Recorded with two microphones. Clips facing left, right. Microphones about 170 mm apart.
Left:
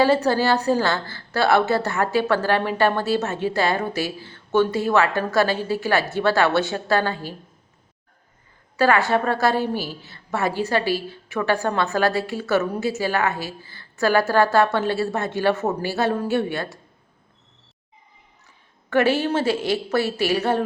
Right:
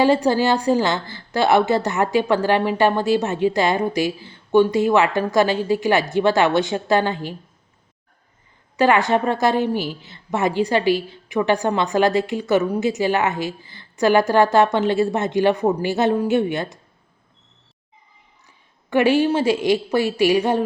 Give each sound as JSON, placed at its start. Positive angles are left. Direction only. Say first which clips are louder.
{"t": 0.0, "sound": "a woman's voice", "louder": "right 2 dB", "side_deg": -15}
{"t": 8.7, "sound": "a woman's voice", "louder": "right 2 dB", "side_deg": -15}
{"t": 18.9, "sound": "a woman's voice", "louder": "right 3 dB", "side_deg": -15}